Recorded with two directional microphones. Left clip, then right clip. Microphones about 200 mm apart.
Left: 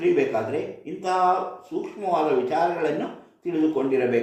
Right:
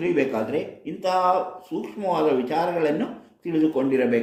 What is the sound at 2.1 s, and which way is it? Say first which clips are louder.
Speech: left 1 dB; 40° right (ahead or behind).